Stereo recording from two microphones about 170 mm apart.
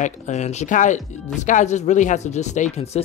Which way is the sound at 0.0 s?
45° left (ahead or behind).